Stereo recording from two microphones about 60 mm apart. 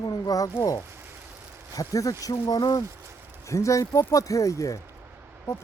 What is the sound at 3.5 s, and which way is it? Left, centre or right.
Speech, left.